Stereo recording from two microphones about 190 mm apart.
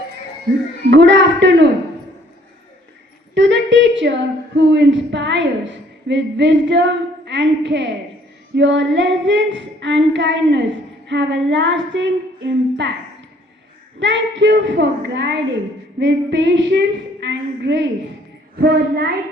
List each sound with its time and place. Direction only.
0.9 s a woman's voice: 65° right (ahead or behind)
3.3 s a woman's voice: 70° right (ahead or behind)
14.0 s a woman's voice: 70° right (ahead or behind)
18.6 s a child's voice: 55° right (ahead or behind)